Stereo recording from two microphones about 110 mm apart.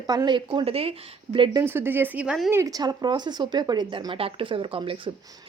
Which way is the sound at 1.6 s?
20° right (ahead or behind).